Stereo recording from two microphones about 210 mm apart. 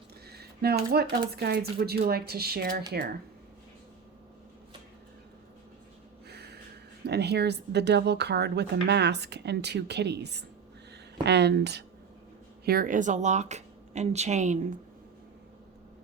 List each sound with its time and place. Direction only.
0.3 s a sound: 50° right (ahead or behind)
1.3 s speech: 50° right (ahead or behind)
6.2 s snort: 50° right (ahead or behind)
7.0 s speech: 50° right (ahead or behind); by 14.7 s 35° right (ahead or behind)